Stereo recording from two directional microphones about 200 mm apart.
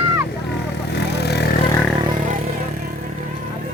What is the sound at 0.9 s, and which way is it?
Vehicle, 55° left (ahead or behind).